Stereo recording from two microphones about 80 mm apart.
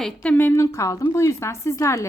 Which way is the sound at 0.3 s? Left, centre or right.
Left.